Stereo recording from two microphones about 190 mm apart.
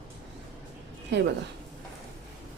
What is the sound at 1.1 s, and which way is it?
Speech, 65° right (ahead or behind).